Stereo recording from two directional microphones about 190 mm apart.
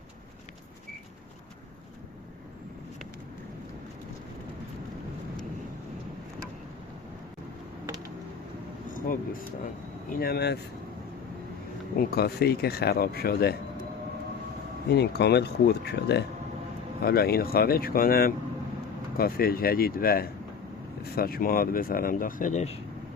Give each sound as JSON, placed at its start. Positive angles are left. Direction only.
{"t": 8.9, "sound": "speech", "side_deg": 45}
{"t": 11.9, "sound": "speech", "side_deg": 55}
{"t": 14.8, "sound": "speech", "side_deg": 60}